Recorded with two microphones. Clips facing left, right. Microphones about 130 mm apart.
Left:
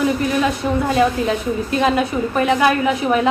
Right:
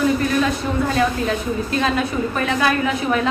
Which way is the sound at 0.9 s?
20° left (ahead or behind).